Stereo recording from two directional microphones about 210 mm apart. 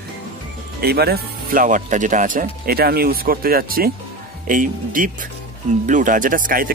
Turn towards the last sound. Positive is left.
turn(degrees=-40)  # may be behind; listen again after turning